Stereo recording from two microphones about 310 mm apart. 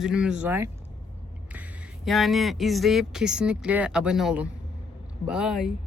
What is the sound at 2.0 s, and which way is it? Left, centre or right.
Speech, centre.